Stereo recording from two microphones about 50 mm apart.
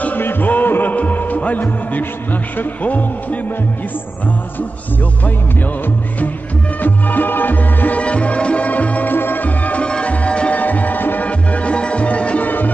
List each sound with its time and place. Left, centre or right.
0.0 s music: left
0.9 s a man's voice: left
6.8 s music: left
10.6 s music: left
11.2 s music: left
12.4 s music: left